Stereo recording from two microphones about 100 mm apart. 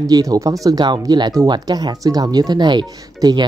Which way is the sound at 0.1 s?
35° right (ahead or behind).